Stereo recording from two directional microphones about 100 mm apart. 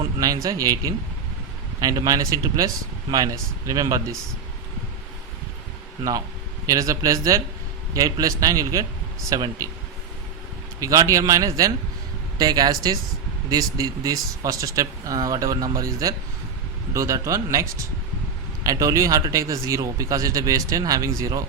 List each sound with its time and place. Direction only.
0.2 s speech: 40° right (ahead or behind)
6.7 s speech: 35° right (ahead or behind)
10.8 s speech: 35° right (ahead or behind)